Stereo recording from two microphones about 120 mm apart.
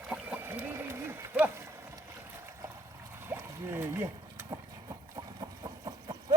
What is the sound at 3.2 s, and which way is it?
Boat, 20° right (ahead or behind).